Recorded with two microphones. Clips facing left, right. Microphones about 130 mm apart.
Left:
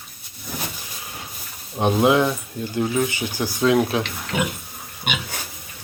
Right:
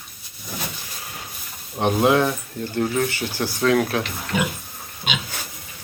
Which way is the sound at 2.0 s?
15° left (ahead or behind).